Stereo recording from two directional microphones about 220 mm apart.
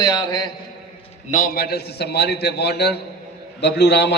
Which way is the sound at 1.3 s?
40° left (ahead or behind).